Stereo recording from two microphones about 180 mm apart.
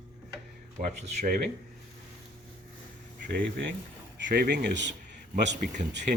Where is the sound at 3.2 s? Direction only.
80° right.